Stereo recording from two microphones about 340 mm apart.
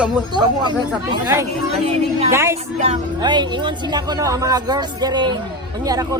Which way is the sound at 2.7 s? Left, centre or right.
Centre.